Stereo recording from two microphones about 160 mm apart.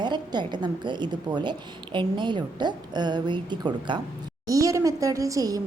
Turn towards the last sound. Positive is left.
turn(degrees=-20)  # may be behind; listen again after turning